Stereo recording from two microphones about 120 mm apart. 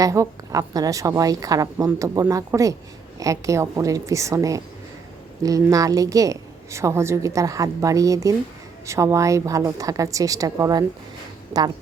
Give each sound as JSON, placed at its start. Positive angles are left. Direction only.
{"t": 0.0, "sound": "a woman's voice", "side_deg": -25}